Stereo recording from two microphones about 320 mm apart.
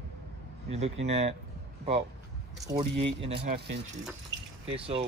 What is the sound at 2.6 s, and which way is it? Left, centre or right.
Speech, centre.